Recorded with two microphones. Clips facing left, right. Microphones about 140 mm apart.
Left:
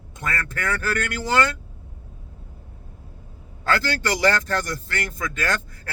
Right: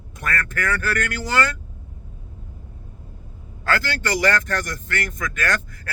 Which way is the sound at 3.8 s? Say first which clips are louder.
Left 1 dB; 30° left (ahead or behind).